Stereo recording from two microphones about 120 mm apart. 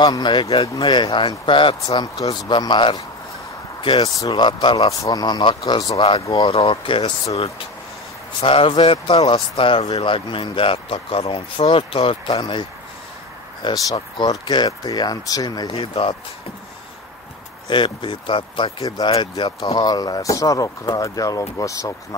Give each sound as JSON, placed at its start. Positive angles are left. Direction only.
{"t": 0.0, "sound": "speech", "side_deg": 35}
{"t": 15.7, "sound": "speech", "side_deg": 55}
{"t": 17.6, "sound": "speech", "side_deg": 40}
{"t": 18.8, "sound": "speech", "side_deg": 35}